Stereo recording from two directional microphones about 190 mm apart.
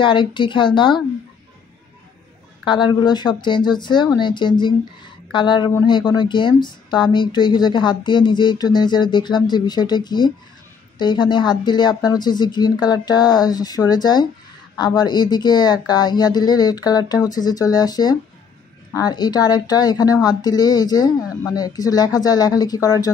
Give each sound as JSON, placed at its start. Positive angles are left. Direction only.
{"t": 0.0, "sound": "speech", "side_deg": 25}
{"t": 2.6, "sound": "speech", "side_deg": 25}